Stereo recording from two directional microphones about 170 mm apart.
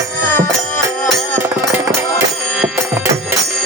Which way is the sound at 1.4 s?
15° right (ahead or behind).